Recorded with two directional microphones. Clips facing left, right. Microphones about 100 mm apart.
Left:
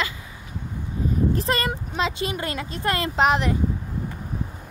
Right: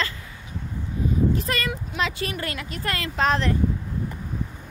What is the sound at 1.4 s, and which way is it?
Speech, 30° left (ahead or behind).